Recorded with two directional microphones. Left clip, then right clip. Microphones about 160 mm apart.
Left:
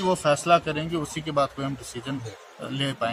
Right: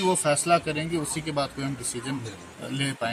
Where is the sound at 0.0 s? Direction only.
5° left (ahead or behind).